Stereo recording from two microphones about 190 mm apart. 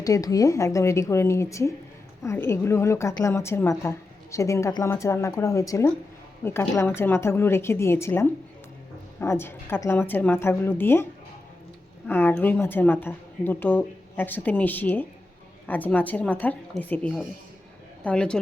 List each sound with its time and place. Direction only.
0.0 s a woman's voice: 20° left (ahead or behind)